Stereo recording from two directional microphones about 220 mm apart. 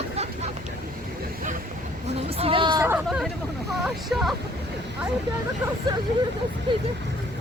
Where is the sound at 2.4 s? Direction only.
25° right (ahead or behind).